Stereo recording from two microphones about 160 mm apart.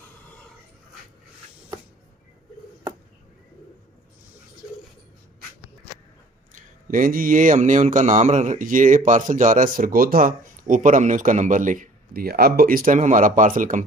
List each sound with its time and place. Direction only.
6.5 s speech: 60° right (ahead or behind)